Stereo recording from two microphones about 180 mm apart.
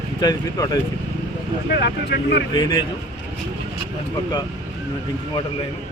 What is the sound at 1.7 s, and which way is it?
Speech, 60° left (ahead or behind).